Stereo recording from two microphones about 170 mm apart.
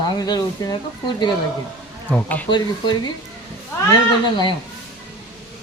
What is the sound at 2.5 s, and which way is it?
Speech, 25° left (ahead or behind).